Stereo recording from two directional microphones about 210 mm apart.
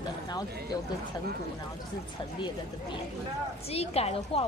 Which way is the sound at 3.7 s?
30° left (ahead or behind).